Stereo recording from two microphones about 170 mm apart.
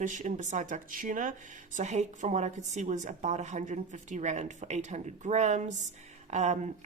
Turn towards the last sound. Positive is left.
turn(degrees=-45)  # may be behind; listen again after turning